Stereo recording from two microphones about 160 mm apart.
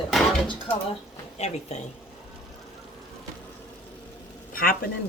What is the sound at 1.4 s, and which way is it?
Speech, 45° left (ahead or behind).